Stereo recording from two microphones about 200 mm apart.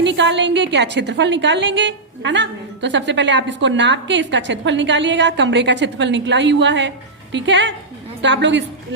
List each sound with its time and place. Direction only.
0.0 s a woman's voice: 60° right (ahead or behind)